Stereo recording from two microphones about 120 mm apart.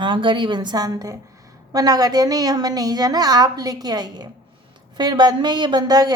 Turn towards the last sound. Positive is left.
turn(degrees=-35)  # may be behind; listen again after turning